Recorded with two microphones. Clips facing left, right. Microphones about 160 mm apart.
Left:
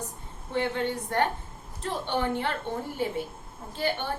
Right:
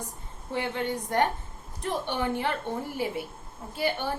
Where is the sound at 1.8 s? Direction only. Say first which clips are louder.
Even; 15° right (ahead or behind).